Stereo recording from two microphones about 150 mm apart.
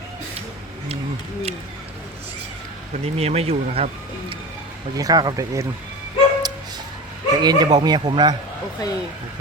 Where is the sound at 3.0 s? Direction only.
45° right (ahead or behind).